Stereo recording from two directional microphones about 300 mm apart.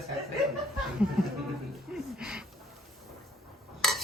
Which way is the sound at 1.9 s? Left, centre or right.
Centre.